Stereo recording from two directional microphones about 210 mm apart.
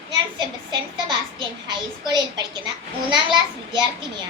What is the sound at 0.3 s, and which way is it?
A child's voice, 20° right (ahead or behind).